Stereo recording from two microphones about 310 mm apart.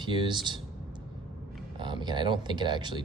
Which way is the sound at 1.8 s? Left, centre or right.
Centre.